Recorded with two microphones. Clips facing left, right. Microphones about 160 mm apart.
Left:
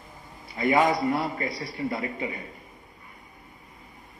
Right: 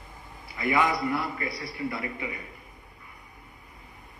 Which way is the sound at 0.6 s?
30° left (ahead or behind).